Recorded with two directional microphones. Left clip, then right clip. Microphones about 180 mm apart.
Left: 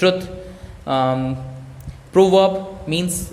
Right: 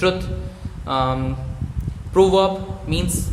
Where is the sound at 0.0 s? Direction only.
15° left (ahead or behind).